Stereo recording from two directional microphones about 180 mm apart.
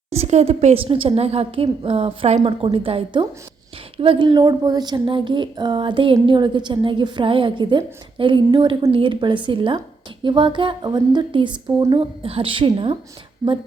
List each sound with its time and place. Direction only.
0.1 s a woman's voice: 35° right (ahead or behind)